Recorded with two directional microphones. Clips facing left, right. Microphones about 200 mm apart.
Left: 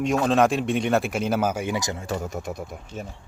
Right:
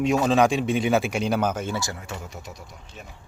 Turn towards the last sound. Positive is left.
turn(degrees=55)  # may be behind; listen again after turning